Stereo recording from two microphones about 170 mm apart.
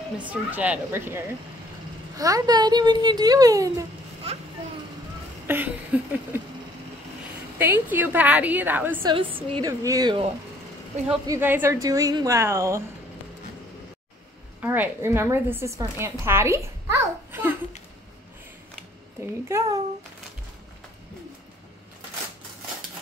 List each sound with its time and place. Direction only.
0.3 s speech: 10° right (ahead or behind)
5.5 s speech: 10° right (ahead or behind)
7.5 s speech: 10° right (ahead or behind)
9.0 s a woman's voice: 30° right (ahead or behind)
9.7 s speech: 20° right (ahead or behind)
11.2 s speech: 10° right (ahead or behind)
14.6 s a child's voice: 10° right (ahead or behind)
19.4 s speech: 15° right (ahead or behind)